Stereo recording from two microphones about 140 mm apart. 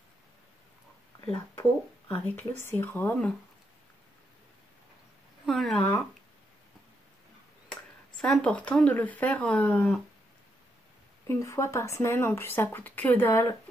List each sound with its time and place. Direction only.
1.5 s speech: 15° left (ahead or behind)
5.4 s speech: centre (ahead or behind)
7.7 s speech: 5° left (ahead or behind)
11.2 s speech: 20° left (ahead or behind)